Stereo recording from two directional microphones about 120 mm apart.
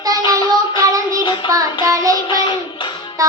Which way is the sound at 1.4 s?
30° right (ahead or behind).